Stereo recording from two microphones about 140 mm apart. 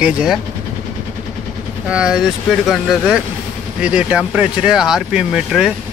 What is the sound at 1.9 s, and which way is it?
Speech, 5° right (ahead or behind).